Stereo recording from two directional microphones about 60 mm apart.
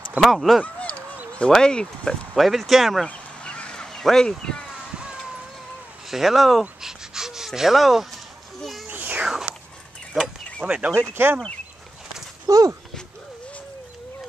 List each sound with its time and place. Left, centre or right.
0.2 s speech: centre
0.7 s a sound: left
1.5 s speech: centre
2.3 s speech: centre
3.1 s a sound: centre
4.9 s a sound: centre
6.0 s speech: centre
6.8 s gasp: centre
8.8 s a sound: right
9.2 s biting: centre
10.1 s speech: centre
10.6 s speech: centre
11.0 s speech: right
12.4 s speech: right